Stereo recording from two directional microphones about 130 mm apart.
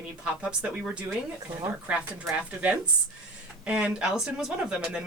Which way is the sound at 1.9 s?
10° right (ahead or behind).